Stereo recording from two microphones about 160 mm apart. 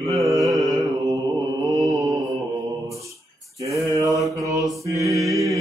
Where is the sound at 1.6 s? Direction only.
25° right (ahead or behind).